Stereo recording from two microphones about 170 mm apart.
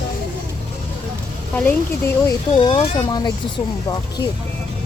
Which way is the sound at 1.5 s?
10° left (ahead or behind).